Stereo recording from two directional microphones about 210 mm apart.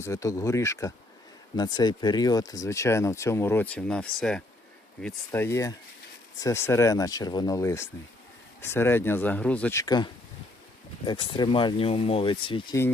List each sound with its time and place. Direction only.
0.0 s speech: 15° left (ahead or behind)